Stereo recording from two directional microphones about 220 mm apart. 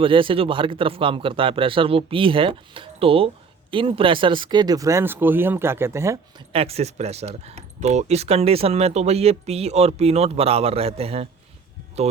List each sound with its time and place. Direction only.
0.0 s speech: 25° right (ahead or behind)
6.5 s speech: 25° right (ahead or behind)